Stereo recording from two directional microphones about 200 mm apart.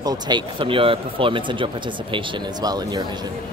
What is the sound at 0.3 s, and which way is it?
Speech, 25° right (ahead or behind).